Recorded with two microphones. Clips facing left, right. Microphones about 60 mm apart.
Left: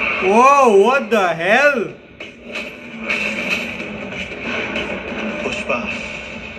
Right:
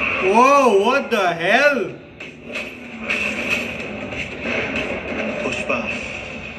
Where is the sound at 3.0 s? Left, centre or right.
Left.